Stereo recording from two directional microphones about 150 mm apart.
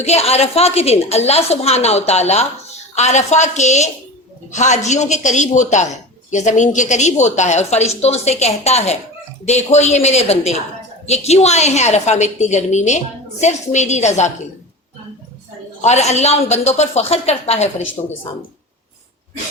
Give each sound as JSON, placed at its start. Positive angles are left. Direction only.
{"t": 0.0, "sound": "speech", "side_deg": 45}
{"t": 15.8, "sound": "speech", "side_deg": 50}